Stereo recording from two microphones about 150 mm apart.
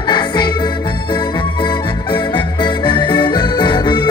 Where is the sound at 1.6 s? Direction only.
30° left (ahead or behind).